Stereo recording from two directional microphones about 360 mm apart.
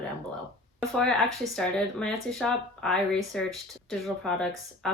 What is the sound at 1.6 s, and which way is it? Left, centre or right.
Speech, centre.